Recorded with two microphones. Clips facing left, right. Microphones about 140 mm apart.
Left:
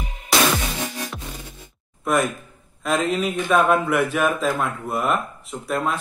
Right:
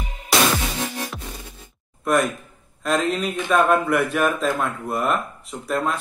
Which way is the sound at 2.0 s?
Centre (ahead or behind).